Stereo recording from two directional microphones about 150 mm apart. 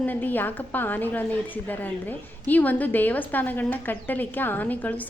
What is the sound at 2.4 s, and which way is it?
A woman's voice, 10° left (ahead or behind).